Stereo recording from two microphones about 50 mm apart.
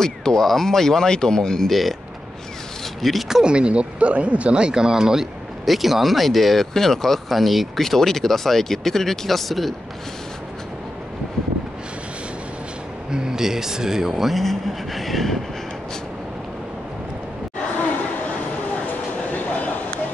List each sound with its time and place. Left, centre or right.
0.4 s speech: centre
1.7 s speech: centre
3.0 s speech: centre
3.5 s speech: right; by 9.8 s centre
13.1 s speech: centre
19.3 s a sound: left